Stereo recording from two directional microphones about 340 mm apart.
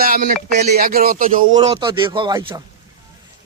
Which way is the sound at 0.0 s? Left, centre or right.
Right.